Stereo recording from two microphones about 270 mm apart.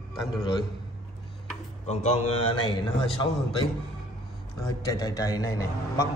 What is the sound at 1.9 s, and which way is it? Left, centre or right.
Speech, left.